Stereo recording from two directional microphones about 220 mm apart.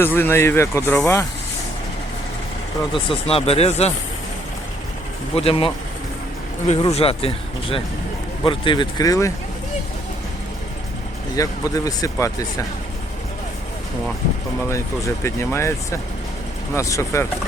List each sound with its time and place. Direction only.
0.0 s speech: 10° left (ahead or behind)
2.9 s speech: 25° left (ahead or behind)
5.3 s speech: 25° left (ahead or behind)
11.3 s speech: 15° left (ahead or behind)
14.7 s speech: 10° left (ahead or behind)
16.7 s speech: 15° left (ahead or behind)